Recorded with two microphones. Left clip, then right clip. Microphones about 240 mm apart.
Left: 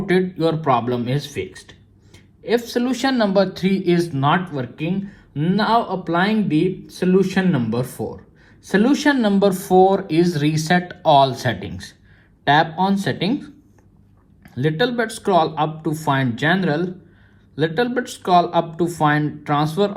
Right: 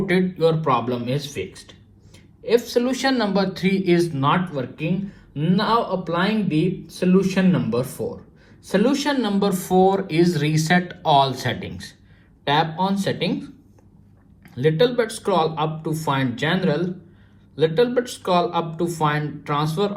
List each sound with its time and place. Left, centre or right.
0.1 s speech: left